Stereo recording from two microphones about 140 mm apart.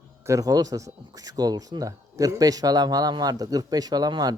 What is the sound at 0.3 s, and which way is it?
Speech, 25° right (ahead or behind).